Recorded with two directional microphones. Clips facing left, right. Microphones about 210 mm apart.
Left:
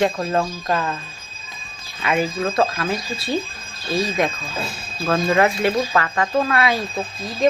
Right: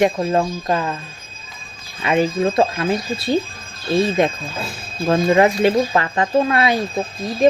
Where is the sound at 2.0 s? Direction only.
25° right (ahead or behind).